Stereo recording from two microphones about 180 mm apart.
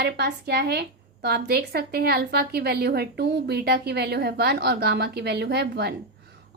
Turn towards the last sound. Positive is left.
turn(degrees=-65)  # may be behind; listen again after turning